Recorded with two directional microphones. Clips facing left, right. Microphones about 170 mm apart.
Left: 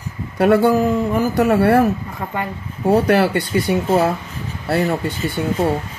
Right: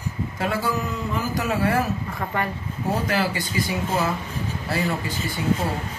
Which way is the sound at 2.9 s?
60° left (ahead or behind).